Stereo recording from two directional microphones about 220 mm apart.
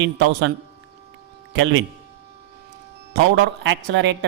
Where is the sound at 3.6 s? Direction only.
55° right (ahead or behind).